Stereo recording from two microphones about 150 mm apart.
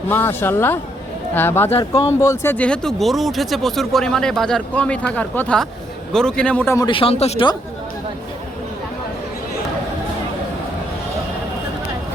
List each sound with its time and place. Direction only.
0.1 s speech: 15° left (ahead or behind)
6.7 s a man's voice: 35° left (ahead or behind)